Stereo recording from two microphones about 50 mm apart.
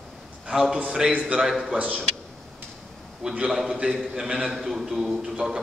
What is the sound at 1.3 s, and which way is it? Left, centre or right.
Speech, centre.